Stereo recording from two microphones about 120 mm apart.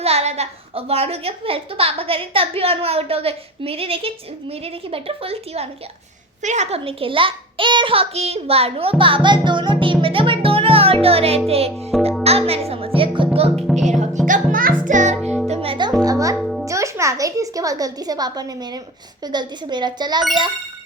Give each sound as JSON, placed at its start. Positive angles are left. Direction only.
{"t": 0.0, "sound": "a woman's voice", "side_deg": -60}
{"t": 6.4, "sound": "a woman's voice", "side_deg": -75}
{"t": 11.4, "sound": "music", "side_deg": -55}
{"t": 11.7, "sound": "a child's voice", "side_deg": 0}
{"t": 12.2, "sound": "music", "side_deg": -60}
{"t": 13.6, "sound": "a child's voice", "side_deg": 0}
{"t": 14.8, "sound": "music", "side_deg": -90}
{"t": 15.4, "sound": "music", "side_deg": -55}
{"t": 15.9, "sound": "music", "side_deg": -30}
{"t": 16.4, "sound": "music", "side_deg": 0}
{"t": 16.6, "sound": "a child's voice", "side_deg": -25}